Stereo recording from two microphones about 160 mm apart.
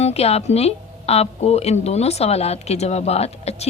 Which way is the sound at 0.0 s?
40° left (ahead or behind).